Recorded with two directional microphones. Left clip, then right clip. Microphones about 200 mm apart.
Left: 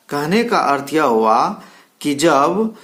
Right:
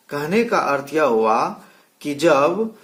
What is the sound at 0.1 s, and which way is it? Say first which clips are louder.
Speech: left 3 dB; 25° left (ahead or behind).